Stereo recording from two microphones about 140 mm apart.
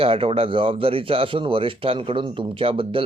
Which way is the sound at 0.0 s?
45° right (ahead or behind).